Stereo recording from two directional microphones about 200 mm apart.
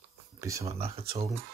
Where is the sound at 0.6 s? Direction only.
30° right (ahead or behind).